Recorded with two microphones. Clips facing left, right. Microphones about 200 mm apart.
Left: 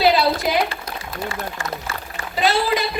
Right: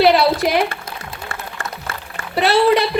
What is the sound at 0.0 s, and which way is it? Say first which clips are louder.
Speech: right 4 dB; 65° right (ahead or behind).